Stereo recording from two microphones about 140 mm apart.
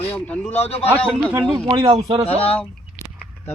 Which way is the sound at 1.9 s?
40° right (ahead or behind).